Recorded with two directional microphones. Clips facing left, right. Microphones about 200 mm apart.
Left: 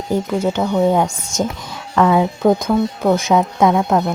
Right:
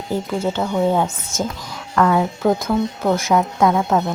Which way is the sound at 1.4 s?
20° left (ahead or behind).